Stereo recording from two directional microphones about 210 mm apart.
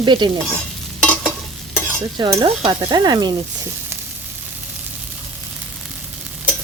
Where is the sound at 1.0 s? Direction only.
5° left (ahead or behind).